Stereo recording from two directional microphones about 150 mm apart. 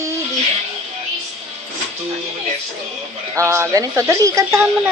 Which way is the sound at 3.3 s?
15° right (ahead or behind).